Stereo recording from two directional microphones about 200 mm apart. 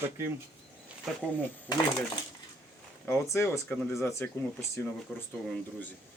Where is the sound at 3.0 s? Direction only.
10° left (ahead or behind).